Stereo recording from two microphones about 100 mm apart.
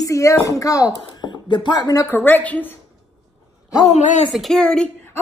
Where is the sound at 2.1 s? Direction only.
20° left (ahead or behind).